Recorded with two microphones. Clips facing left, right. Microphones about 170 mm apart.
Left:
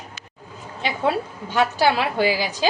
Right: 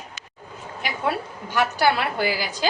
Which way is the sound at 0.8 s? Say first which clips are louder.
Left 4 dB; 25° left (ahead or behind).